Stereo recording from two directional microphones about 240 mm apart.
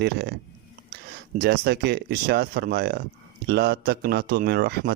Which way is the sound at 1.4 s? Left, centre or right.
Right.